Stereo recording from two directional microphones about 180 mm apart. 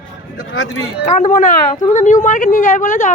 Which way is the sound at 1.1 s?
45° left (ahead or behind).